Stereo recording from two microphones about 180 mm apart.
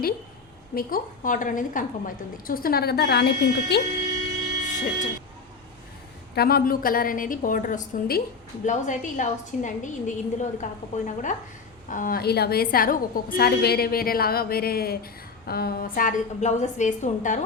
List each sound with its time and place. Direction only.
0.8 s a woman's voice: 50° left (ahead or behind)
4.6 s vehicle: 45° left (ahead or behind)
6.3 s a woman's voice: 60° left (ahead or behind); by 17.4 s 40° left (ahead or behind)